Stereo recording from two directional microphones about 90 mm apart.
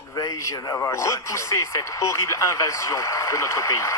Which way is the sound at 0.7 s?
30° left (ahead or behind).